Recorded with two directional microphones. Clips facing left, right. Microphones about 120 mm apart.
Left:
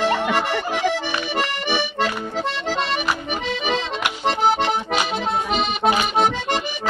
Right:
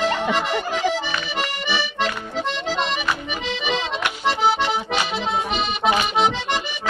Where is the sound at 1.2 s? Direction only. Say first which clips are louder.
Left 3 dB; 45° left (ahead or behind).